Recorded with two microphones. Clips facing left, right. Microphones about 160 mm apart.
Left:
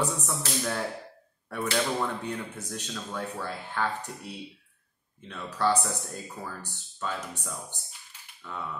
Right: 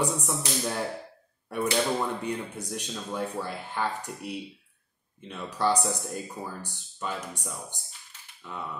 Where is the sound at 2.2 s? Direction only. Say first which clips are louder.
Right 2 dB; 15° right (ahead or behind).